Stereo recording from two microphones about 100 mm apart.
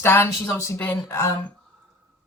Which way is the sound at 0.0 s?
25° left (ahead or behind).